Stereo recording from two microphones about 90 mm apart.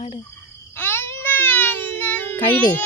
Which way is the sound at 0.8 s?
25° left (ahead or behind).